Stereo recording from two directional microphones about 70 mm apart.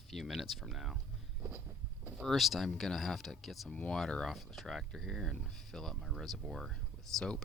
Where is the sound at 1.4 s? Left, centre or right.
Right.